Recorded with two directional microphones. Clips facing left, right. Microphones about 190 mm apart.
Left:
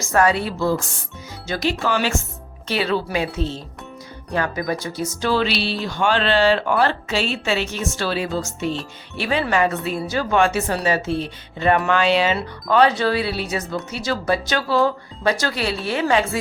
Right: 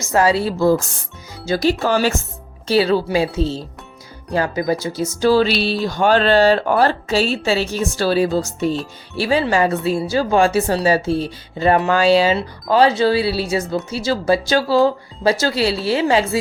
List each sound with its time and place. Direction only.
0.1 s speech: 30° right (ahead or behind)